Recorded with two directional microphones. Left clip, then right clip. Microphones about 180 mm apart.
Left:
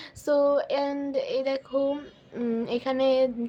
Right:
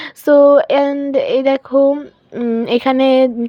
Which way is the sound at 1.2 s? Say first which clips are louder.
Right 14 dB; 40° right (ahead or behind).